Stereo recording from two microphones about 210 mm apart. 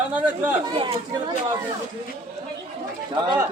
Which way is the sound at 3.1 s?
20° right (ahead or behind).